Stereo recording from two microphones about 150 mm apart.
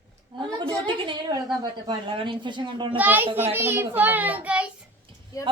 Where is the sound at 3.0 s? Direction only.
10° right (ahead or behind).